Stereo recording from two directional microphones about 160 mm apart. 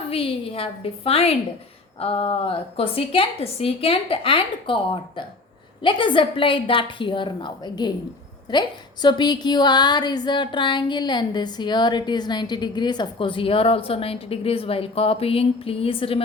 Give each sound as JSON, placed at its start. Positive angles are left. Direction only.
{"t": 0.1, "sound": "a woman's voice", "side_deg": 35}